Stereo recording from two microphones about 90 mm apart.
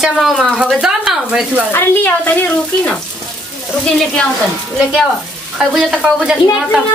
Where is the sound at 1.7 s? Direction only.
25° left (ahead or behind).